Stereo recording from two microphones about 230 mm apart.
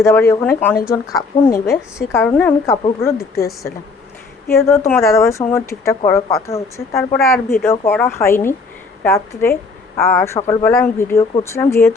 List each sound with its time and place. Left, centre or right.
0.0 s a woman's voice: centre
10.3 s speech: left
10.6 s a woman's voice: centre